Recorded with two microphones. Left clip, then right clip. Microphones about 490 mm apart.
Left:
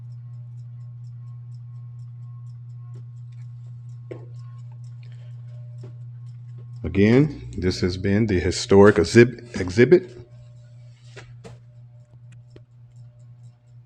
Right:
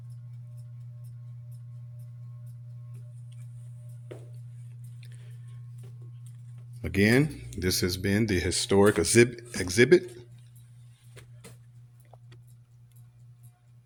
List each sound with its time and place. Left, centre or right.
6.8 s speech: right